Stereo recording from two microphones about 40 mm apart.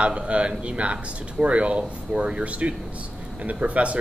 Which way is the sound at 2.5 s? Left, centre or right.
Right.